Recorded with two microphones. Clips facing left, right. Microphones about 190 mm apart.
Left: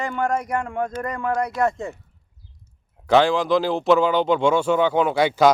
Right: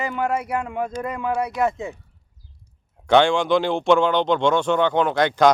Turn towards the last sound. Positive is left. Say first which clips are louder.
# even
turn(degrees=5)  # may be behind; listen again after turning